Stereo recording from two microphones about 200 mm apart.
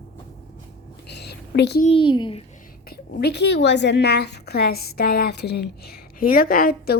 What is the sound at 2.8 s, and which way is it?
A woman's voice, 55° left (ahead or behind).